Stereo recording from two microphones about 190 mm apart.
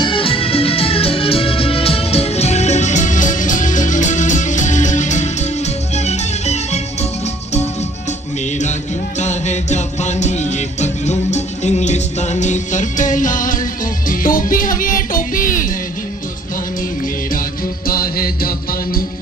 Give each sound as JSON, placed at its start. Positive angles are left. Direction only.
{"t": 0.0, "sound": "music", "side_deg": 25}
{"t": 9.1, "sound": "music", "side_deg": 40}
{"t": 17.8, "sound": "music", "side_deg": 50}